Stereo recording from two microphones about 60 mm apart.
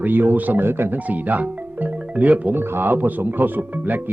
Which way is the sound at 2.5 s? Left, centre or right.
Right.